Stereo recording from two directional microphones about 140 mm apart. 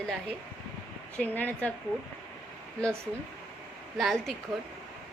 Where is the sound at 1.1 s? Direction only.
10° left (ahead or behind).